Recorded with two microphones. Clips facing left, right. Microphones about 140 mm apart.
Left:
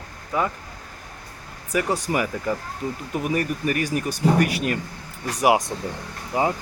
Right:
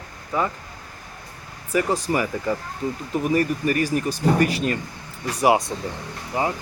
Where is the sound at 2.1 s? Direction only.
5° left (ahead or behind).